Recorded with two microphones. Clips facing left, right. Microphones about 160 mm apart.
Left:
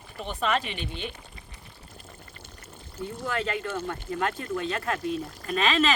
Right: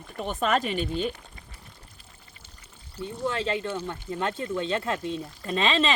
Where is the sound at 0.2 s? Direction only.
45° right (ahead or behind).